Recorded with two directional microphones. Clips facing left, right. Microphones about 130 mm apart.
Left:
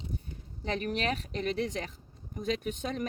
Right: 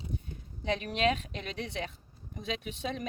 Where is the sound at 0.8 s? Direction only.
40° left (ahead or behind).